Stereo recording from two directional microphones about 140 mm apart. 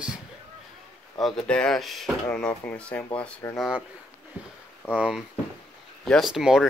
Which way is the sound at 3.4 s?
20° left (ahead or behind).